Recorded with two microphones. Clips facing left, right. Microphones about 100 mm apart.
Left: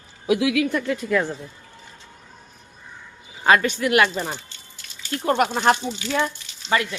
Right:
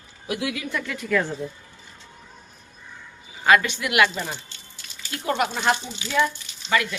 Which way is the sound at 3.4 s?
35° left (ahead or behind).